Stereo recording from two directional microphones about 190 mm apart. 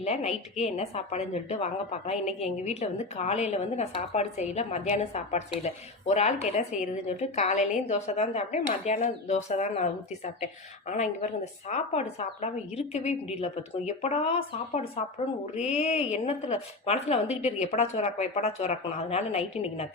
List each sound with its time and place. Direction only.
0.0 s a woman's voice: 35° left (ahead or behind)
15.5 s a woman's voice: 35° left (ahead or behind)